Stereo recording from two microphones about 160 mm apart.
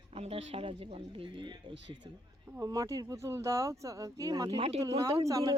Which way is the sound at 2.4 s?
15° right (ahead or behind).